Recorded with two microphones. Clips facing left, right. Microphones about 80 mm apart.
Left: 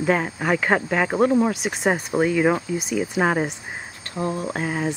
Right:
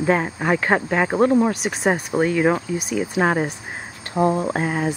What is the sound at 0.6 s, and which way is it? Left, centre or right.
Speech, centre.